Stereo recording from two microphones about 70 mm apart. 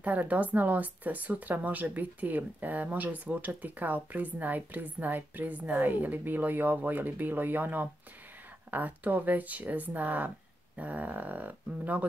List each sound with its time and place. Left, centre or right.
0.0 s speech: right